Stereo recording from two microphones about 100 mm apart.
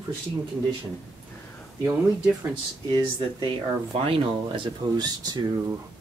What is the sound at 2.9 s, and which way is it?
Speech, 55° right (ahead or behind).